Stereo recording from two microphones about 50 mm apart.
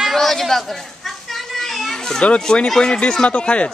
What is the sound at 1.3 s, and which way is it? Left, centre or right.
Children playing, centre.